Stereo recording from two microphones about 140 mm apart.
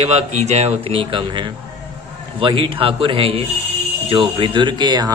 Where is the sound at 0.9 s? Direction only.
40° right (ahead or behind).